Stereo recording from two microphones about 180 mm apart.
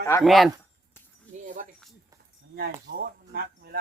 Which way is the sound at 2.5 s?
65° right (ahead or behind).